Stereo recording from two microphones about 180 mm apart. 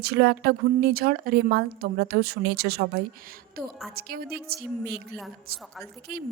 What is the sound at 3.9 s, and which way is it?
A woman's voice, 60° right (ahead or behind).